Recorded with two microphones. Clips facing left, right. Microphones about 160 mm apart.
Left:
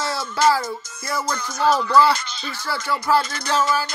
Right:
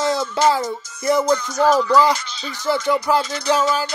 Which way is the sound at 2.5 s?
20° right (ahead or behind).